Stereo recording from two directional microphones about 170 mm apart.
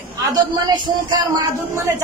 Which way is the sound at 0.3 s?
20° right (ahead or behind).